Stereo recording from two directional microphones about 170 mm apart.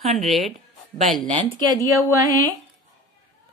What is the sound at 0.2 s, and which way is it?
Speech, centre (ahead or behind).